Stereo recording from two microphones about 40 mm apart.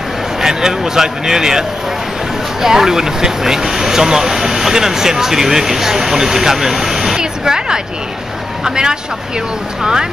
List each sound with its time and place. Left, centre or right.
0.4 s speech: centre
2.6 s speech: centre